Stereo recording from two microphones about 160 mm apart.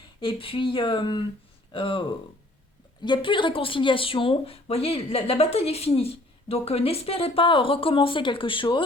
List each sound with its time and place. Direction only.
0.2 s speech: 30° left (ahead or behind)